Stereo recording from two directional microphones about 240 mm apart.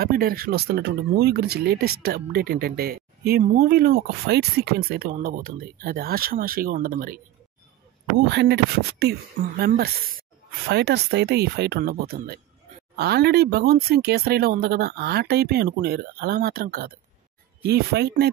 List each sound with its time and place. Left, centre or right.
0.0 s speech: right
8.3 s speech: right